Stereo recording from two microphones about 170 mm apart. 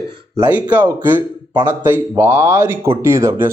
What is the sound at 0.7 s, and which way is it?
Speech, 10° right (ahead or behind).